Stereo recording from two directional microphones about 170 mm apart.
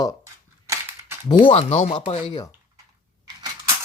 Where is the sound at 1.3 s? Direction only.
30° left (ahead or behind).